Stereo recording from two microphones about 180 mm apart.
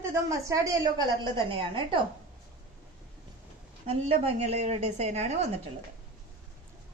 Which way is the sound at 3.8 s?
35° right (ahead or behind).